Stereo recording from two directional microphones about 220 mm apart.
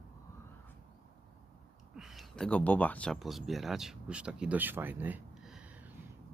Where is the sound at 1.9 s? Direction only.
Centre (ahead or behind).